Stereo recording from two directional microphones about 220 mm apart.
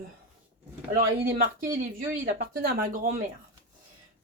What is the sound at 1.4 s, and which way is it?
Speech, 40° right (ahead or behind).